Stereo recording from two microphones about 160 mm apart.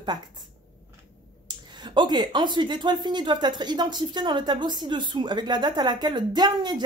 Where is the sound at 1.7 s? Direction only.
25° right (ahead or behind).